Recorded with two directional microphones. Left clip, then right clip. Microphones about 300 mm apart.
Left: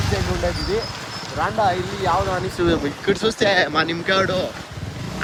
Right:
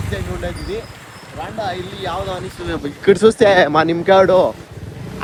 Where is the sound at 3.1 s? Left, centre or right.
Centre.